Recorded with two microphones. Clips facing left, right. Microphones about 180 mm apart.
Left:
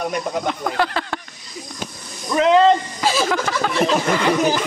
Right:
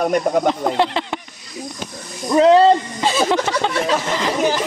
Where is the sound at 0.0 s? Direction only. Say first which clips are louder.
Right 6 dB; 50° right (ahead or behind).